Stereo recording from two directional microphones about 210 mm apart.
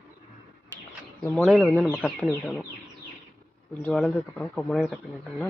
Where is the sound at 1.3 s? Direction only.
Centre (ahead or behind).